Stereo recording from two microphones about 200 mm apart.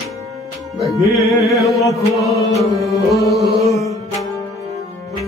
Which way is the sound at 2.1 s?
Centre (ahead or behind).